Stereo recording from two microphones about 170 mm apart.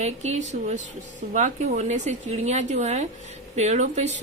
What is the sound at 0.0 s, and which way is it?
A woman's voice, 40° right (ahead or behind).